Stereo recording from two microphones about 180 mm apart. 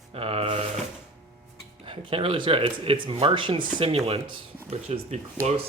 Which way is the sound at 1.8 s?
30° right (ahead or behind).